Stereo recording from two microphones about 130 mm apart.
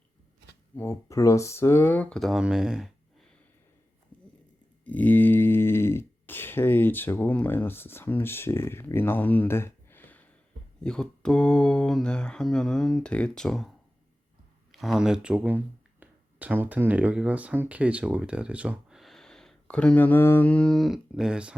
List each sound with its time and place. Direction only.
0.8 s speech: 20° left (ahead or behind); by 3.2 s 5° right (ahead or behind)
4.9 s speech: 15° left (ahead or behind)
10.8 s mantra: 5° left (ahead or behind)
14.7 s speech: centre (ahead or behind)